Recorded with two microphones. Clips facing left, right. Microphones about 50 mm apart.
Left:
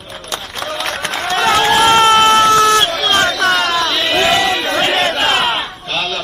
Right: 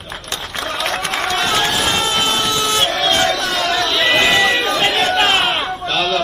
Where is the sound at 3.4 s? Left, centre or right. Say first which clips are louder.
Left 6 dB; left.